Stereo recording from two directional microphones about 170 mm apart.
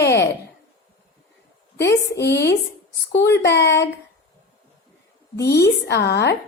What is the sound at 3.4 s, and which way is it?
Speech, 85° left.